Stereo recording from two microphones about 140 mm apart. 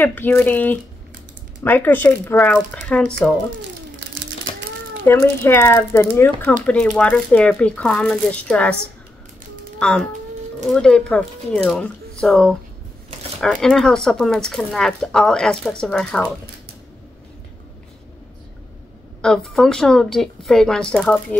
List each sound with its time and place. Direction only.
0.0 s speech: 15° left (ahead or behind)
5.0 s speech: 20° left (ahead or behind)
9.8 s a child's voice: 5° left (ahead or behind)
19.2 s speech: 5° left (ahead or behind)